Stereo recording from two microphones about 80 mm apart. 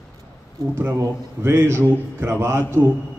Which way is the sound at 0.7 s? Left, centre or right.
Right.